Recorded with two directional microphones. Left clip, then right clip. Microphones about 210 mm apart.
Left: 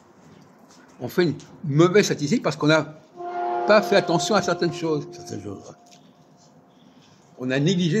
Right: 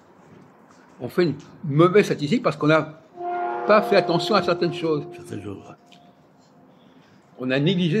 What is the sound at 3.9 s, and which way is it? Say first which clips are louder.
Speech: right 1 dB; 35° left (ahead or behind).